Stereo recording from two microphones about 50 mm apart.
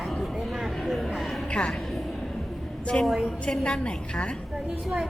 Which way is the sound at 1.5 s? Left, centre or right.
Left.